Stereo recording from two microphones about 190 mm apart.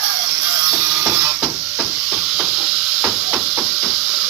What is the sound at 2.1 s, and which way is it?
Hammer, 5° right (ahead or behind).